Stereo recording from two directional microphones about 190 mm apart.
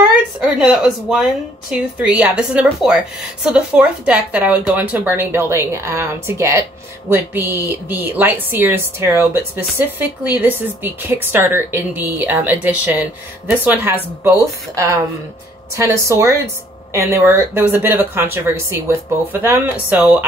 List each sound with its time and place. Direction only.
0.4 s speech: 5° right (ahead or behind)
19.4 s speech: 10° right (ahead or behind)